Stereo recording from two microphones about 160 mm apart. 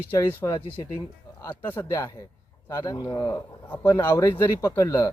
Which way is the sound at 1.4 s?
10° left (ahead or behind).